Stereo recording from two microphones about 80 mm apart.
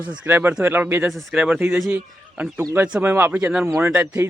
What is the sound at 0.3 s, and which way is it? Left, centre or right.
Speech, right.